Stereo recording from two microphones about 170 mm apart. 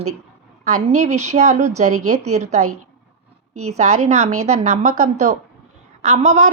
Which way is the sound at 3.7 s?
45° right (ahead or behind).